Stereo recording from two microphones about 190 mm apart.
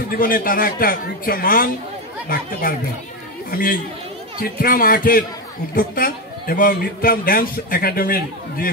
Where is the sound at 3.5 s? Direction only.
50° left (ahead or behind).